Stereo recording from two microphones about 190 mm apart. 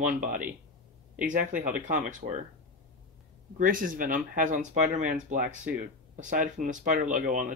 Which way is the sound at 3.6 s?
45° right (ahead or behind).